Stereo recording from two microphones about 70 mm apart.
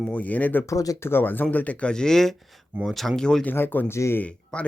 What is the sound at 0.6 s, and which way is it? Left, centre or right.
Speech, left.